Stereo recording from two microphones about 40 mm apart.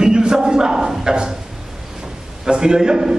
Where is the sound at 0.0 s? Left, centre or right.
Right.